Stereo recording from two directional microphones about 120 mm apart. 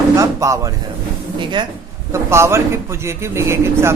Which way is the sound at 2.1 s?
20° right (ahead or behind).